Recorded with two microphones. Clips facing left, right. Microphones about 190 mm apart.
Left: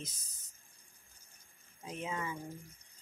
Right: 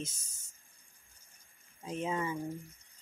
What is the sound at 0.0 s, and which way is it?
Speech, 25° right (ahead or behind).